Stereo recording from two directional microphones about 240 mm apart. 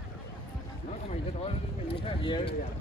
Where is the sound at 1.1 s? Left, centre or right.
Left.